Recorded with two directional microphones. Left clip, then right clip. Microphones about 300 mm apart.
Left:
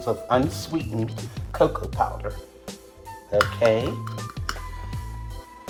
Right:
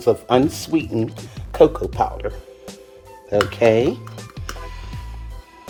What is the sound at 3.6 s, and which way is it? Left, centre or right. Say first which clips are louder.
Speech: right 5 dB; right.